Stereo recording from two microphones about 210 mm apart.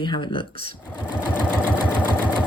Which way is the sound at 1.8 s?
10° right (ahead or behind).